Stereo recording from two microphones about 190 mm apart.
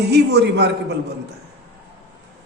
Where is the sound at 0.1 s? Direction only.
60° right (ahead or behind).